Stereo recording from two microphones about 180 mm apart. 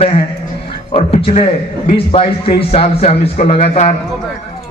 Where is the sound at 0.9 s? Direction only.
35° left (ahead or behind).